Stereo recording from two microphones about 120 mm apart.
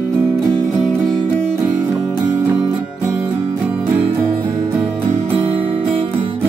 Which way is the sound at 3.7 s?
15° right (ahead or behind).